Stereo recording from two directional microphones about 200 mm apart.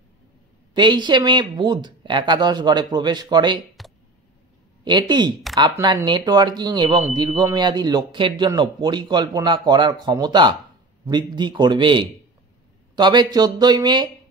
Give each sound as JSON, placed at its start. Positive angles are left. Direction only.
{"t": 0.7, "sound": "speech", "side_deg": -20}
{"t": 4.8, "sound": "speech", "side_deg": -20}